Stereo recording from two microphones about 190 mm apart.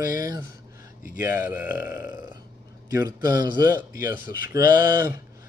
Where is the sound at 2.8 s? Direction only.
20° right (ahead or behind).